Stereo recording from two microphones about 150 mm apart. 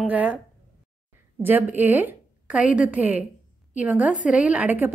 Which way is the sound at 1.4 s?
15° right (ahead or behind).